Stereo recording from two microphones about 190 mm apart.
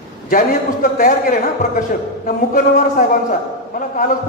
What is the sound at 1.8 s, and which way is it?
A man's voice, 45° left (ahead or behind).